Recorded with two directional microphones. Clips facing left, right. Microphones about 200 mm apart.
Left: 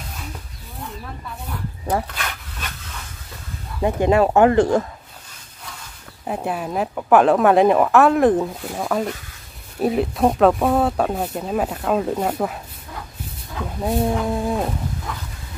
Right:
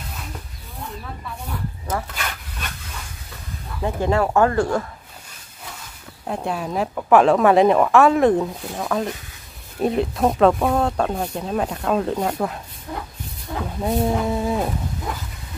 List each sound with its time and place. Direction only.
1.9 s speech: 30° left (ahead or behind)
3.8 s speech: 15° left (ahead or behind)
6.2 s speech: 5° left (ahead or behind)
13.7 s speech: centre (ahead or behind)